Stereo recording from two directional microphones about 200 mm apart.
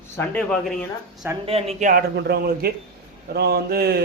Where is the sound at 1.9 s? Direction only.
50° right (ahead or behind).